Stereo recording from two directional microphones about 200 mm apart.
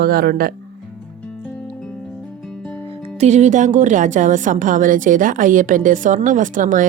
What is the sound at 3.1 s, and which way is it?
A woman's voice, 35° right (ahead or behind).